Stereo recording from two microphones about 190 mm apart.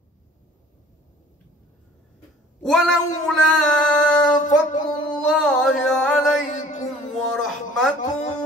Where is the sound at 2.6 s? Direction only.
Centre (ahead or behind).